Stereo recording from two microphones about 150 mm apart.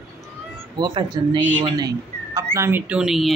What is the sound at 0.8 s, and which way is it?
Speech, 35° right (ahead or behind).